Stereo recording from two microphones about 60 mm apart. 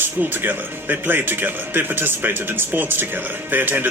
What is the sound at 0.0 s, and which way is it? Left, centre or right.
Speech, right.